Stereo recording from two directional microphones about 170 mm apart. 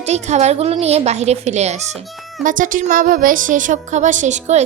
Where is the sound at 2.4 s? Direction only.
50° right (ahead or behind).